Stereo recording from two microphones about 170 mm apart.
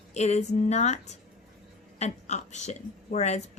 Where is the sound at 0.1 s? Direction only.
40° left (ahead or behind).